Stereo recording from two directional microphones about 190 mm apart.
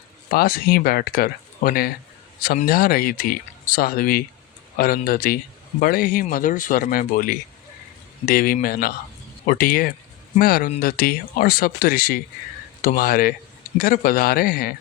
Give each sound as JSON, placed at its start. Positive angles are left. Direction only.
{"t": 0.3, "sound": "speech", "side_deg": 50}